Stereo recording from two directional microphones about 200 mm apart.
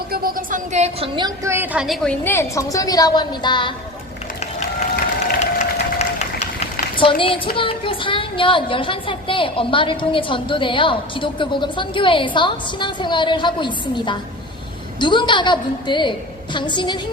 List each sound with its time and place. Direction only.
0.1 s a woman's voice: 45° right (ahead or behind); by 1.5 s 25° right (ahead or behind)
1.5 s a woman's voice: 5° right (ahead or behind)
2.2 s a woman's voice: 10° left (ahead or behind)
6.0 s a sound: 30° left (ahead or behind)
7.0 s a woman's voice: 25° left (ahead or behind)